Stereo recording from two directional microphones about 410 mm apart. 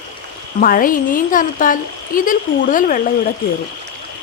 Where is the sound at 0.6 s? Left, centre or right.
Centre.